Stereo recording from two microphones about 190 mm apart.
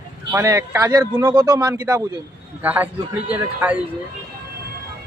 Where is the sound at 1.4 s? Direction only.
20° right (ahead or behind).